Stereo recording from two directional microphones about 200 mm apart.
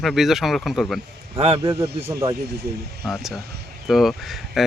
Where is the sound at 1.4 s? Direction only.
30° right (ahead or behind).